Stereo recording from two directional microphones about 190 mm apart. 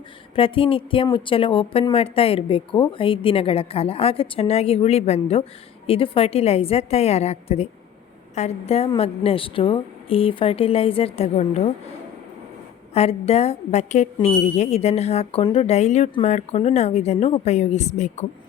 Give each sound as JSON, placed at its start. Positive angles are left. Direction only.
{"t": 0.3, "sound": "a woman's voice", "side_deg": 30}
{"t": 12.9, "sound": "a woman's voice", "side_deg": 30}